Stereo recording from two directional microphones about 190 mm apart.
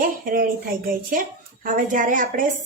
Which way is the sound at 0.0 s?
45° right (ahead or behind).